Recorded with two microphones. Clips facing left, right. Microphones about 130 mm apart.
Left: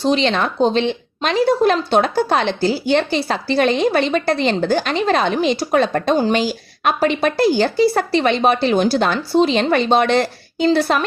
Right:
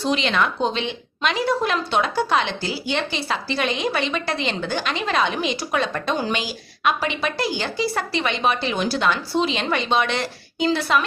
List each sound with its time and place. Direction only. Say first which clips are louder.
0.0 s speech: left 4 dB; 35° left (ahead or behind)